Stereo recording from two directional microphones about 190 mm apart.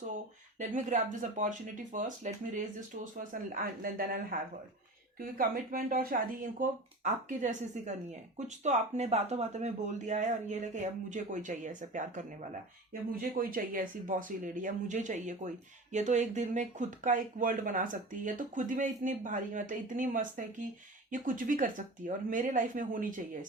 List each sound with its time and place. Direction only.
0.6 s speech: 40° right (ahead or behind)